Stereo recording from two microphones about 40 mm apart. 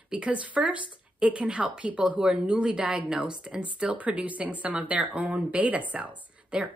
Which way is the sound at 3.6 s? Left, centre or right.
Right.